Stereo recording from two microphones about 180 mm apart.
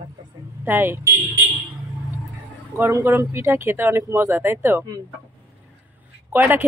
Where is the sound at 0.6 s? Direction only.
10° right (ahead or behind).